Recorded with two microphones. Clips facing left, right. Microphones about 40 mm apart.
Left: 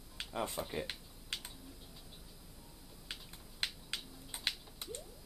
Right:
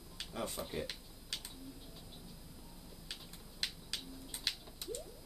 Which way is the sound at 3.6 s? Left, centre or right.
Left.